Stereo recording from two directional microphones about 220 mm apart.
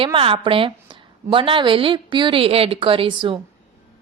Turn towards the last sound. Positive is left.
turn(degrees=-25)  # may be behind; listen again after turning